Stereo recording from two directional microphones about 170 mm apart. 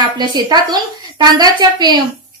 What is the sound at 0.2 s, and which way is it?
A woman's voice, 25° right (ahead or behind).